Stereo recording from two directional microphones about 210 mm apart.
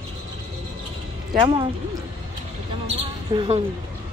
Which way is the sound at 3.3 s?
25° right (ahead or behind).